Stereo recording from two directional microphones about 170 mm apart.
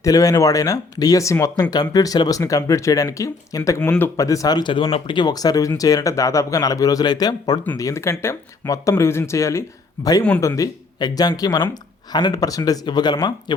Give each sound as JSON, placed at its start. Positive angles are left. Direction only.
{"t": 0.0, "sound": "speech", "side_deg": 20}
{"t": 10.2, "sound": "speech", "side_deg": 5}
{"t": 10.5, "sound": "speech", "side_deg": 20}